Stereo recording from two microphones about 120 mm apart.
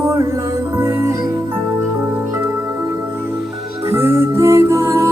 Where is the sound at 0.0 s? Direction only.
25° right (ahead or behind).